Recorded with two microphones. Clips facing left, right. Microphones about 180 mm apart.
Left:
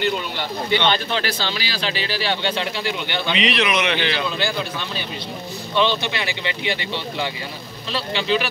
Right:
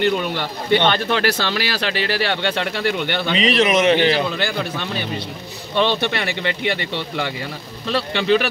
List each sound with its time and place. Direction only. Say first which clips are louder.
0.7 s a man's voice: right 4 dB; 55° right (ahead or behind); by 4.2 s 35° right (ahead or behind)
5.8 s speech: right 2 dB; 60° right (ahead or behind)
7.9 s speech: right 4 dB; 60° right (ahead or behind)